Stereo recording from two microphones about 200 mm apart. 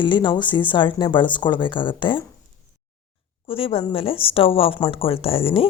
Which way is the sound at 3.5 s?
25° left (ahead or behind).